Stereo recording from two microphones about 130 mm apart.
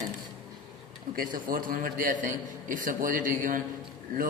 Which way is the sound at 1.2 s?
90° right.